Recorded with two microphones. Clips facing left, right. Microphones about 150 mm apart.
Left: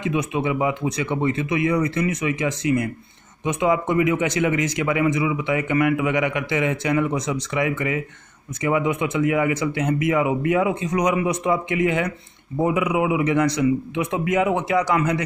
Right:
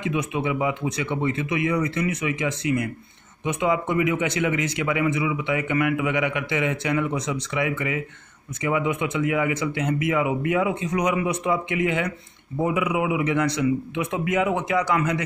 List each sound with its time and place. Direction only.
0.0 s speech: 35° left (ahead or behind)